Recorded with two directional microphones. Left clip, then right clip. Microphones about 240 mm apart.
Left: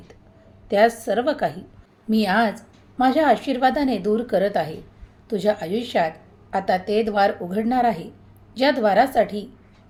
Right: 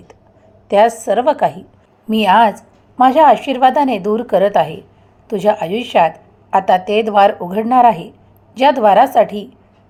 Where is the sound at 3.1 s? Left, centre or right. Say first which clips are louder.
Right 8 dB; centre.